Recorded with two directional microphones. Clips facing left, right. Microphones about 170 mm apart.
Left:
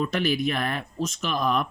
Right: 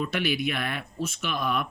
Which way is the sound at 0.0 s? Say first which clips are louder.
Left 3 dB; 40° left (ahead or behind).